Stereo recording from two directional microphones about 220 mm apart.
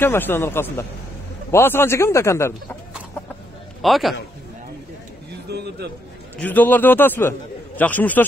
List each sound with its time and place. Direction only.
0.0 s a man's voice: 10° left (ahead or behind)
3.8 s a man's voice: centre (ahead or behind)
5.5 s a sound: 50° right (ahead or behind)
6.4 s a man's voice: 10° left (ahead or behind)